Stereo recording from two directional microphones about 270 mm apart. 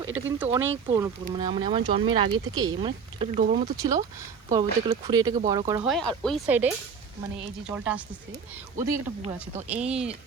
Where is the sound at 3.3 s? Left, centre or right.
Right.